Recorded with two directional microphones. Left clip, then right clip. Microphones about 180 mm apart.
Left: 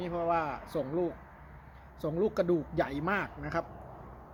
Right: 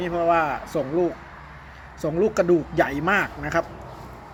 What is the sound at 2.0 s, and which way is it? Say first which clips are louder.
A man's voice: right 9 dB; 10° left (ahead or behind).